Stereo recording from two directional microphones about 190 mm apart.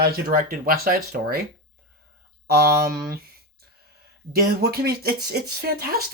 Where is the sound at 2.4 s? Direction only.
55° right (ahead or behind).